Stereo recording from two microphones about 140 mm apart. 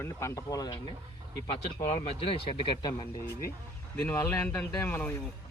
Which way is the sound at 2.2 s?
40° left (ahead or behind).